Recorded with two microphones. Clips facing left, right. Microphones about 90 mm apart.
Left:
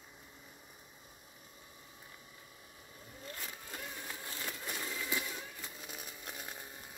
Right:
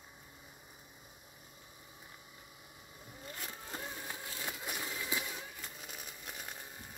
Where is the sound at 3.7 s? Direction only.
25° right (ahead or behind).